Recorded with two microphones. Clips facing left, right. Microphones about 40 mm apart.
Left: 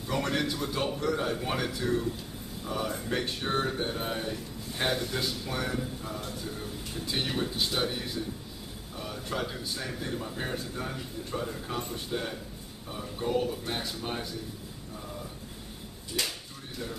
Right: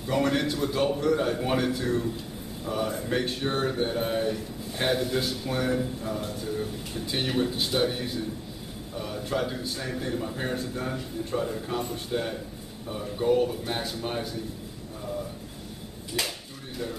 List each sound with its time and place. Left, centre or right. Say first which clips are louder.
0.1 s speech: right 4 dB; centre
16.1 s speech: right 2 dB; centre